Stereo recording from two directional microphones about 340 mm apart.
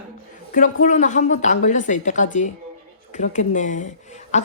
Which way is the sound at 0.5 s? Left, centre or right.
Left.